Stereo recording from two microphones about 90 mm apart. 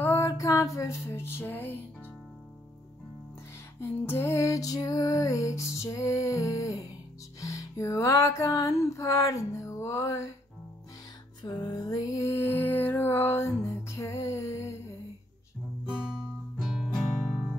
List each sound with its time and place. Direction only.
0.0 s a sound: 30° left (ahead or behind)
0.3 s music: 40° left (ahead or behind); by 1.8 s 20° left (ahead or behind)
4.0 s music: 25° left (ahead or behind)
11.4 s music: 55° left (ahead or behind)
12.2 s mantra: 30° left (ahead or behind)
13.7 s music: 30° left (ahead or behind)
15.9 s guitar: 10° right (ahead or behind)